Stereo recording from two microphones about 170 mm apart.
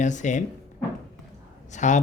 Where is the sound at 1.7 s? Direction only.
45° left (ahead or behind).